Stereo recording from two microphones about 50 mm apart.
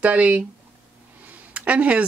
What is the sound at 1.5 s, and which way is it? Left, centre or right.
Speech, right.